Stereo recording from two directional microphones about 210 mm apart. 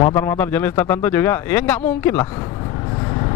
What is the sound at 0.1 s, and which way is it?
Speech, 10° left (ahead or behind).